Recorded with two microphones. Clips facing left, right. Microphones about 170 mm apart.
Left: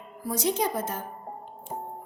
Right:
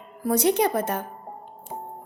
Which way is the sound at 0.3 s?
65° right (ahead or behind).